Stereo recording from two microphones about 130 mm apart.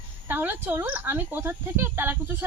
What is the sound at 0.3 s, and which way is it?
Speech, 15° right (ahead or behind).